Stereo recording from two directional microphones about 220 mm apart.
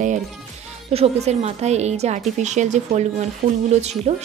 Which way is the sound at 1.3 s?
30° right (ahead or behind).